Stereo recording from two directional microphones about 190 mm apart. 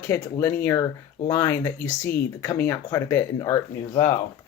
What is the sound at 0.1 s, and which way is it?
Speech, 10° left (ahead or behind).